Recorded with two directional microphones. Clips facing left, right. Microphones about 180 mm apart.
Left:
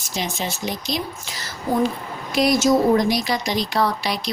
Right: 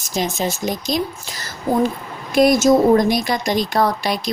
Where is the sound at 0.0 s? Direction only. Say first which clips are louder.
Right 5 dB; 45° right (ahead or behind).